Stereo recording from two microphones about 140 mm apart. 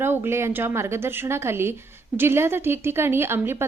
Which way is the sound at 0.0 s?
15° right (ahead or behind).